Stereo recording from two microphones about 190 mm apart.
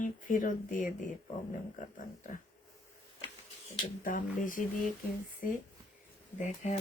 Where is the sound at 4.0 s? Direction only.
45° left (ahead or behind).